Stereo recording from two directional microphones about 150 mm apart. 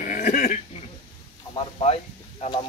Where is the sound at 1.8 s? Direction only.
45° left (ahead or behind).